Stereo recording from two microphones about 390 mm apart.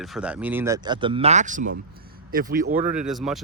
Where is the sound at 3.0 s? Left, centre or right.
Centre.